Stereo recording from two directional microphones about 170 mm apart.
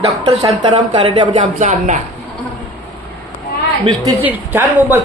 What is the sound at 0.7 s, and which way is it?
Speech, 25° right (ahead or behind).